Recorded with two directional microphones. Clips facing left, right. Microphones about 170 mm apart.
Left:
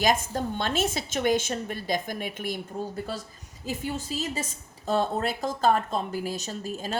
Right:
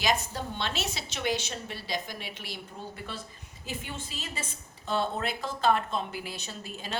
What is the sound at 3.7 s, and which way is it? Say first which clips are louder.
Speech: left 8 dB; 40° left (ahead or behind).